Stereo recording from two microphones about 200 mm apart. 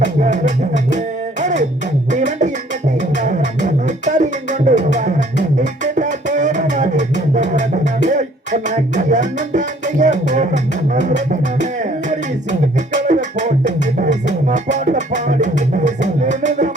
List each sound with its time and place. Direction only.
0.0 s music: 40° right (ahead or behind)
2.1 s beatboxing: 35° right (ahead or behind)
3.2 s music: 40° right (ahead or behind)
8.7 s music: 40° right (ahead or behind)